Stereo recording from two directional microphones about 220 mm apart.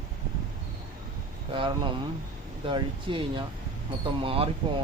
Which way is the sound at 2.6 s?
20° right (ahead or behind).